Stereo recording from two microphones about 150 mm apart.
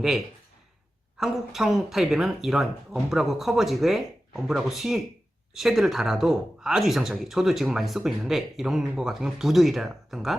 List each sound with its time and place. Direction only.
1.2 s speech: centre (ahead or behind)